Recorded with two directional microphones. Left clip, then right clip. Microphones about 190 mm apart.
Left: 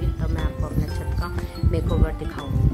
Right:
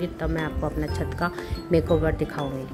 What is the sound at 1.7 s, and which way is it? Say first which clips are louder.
Mantra: right 7 dB; 15° right (ahead or behind).